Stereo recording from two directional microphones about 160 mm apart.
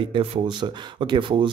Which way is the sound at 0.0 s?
35° right (ahead or behind).